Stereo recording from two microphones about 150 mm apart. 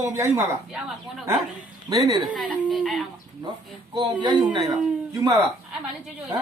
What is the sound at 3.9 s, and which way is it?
Speech, 30° right (ahead or behind).